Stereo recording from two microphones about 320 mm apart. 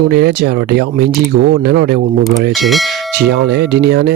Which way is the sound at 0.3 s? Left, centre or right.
Right.